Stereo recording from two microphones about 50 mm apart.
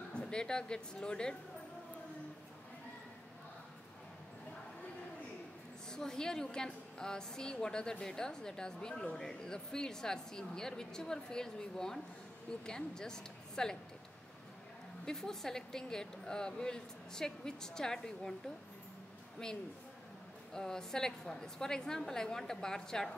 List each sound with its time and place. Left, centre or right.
0.1 s speech: centre
5.9 s a woman's voice: centre
15.0 s a woman's voice: centre
20.5 s a woman's voice: centre